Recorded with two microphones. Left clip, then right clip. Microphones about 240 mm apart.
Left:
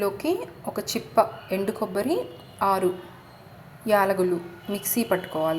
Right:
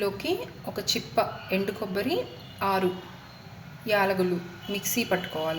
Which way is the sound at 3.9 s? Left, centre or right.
Centre.